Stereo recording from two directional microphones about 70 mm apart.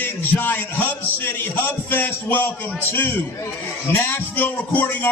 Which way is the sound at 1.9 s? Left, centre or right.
Left.